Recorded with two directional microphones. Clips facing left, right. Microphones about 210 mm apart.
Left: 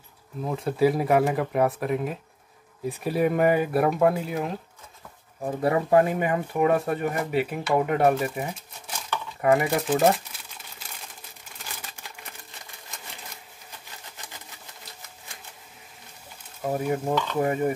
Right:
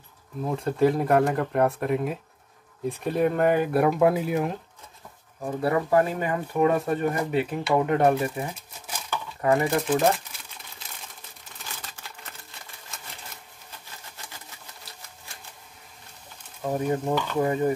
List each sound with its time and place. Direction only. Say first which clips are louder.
0.5 s speech: even; 5° left (ahead or behind)
5.4 s speech: left 1 dB; 20° left (ahead or behind)
10.8 s crumpling: left 1 dB; 5° left (ahead or behind)
11.8 s a sound: even; 10° left (ahead or behind)
16.6 s speech: even; 10° left (ahead or behind)
17.4 s dishes: right 1 dB; 20° left (ahead or behind)